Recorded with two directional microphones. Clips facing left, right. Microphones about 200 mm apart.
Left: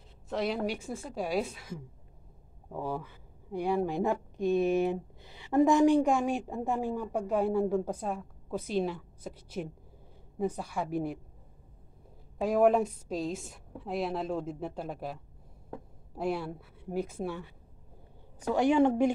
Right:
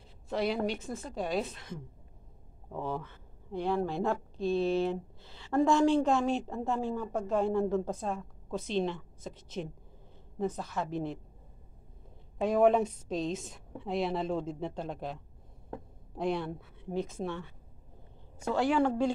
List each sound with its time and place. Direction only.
0.3 s a woman's voice: centre (ahead or behind)
12.4 s a woman's voice: 5° left (ahead or behind)
16.2 s speech: 5° left (ahead or behind)
18.5 s a woman's voice: 20° left (ahead or behind)